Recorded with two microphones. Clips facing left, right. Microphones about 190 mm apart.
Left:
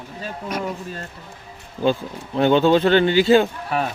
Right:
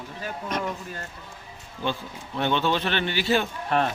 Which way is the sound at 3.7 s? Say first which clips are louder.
Even; 5° left (ahead or behind).